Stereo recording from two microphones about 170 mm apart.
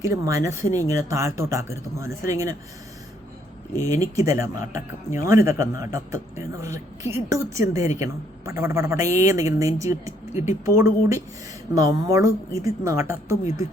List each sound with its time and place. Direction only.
0.0 s a man's voice: 20° right (ahead or behind)
3.8 s a man's voice: 20° right (ahead or behind)